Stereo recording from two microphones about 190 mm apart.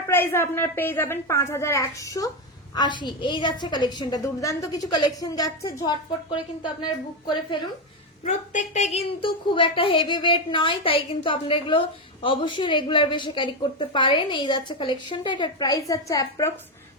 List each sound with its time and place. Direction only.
0.1 s a woman's voice: 10° left (ahead or behind)
8.2 s a woman's voice: 40° left (ahead or behind); by 16.5 s 15° left (ahead or behind)